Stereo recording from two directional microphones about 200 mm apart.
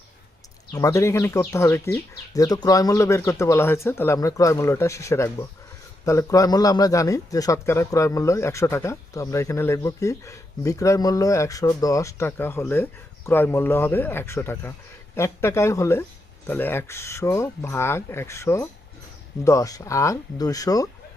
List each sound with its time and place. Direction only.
0.7 s a man's voice: 15° left (ahead or behind)